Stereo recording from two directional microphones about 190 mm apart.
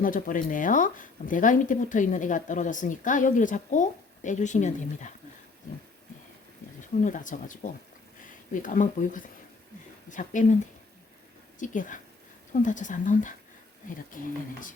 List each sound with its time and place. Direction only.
0.0 s speech: 45° left (ahead or behind)
7.0 s speech: 45° left (ahead or behind)
11.6 s speech: 45° left (ahead or behind)